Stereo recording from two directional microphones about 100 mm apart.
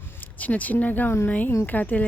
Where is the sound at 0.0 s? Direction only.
20° left (ahead or behind).